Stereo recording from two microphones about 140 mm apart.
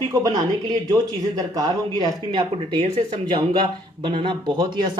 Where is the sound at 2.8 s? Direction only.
45° right (ahead or behind).